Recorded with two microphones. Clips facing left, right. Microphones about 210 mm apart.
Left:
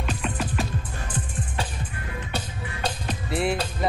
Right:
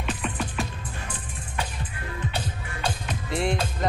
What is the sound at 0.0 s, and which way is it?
Music, centre (ahead or behind).